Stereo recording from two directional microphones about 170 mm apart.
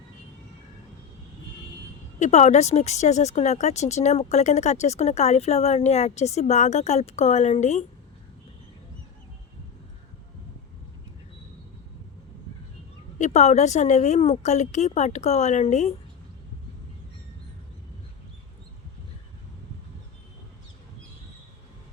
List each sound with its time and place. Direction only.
2.1 s speech: 45° left (ahead or behind)
13.1 s speech: 45° left (ahead or behind)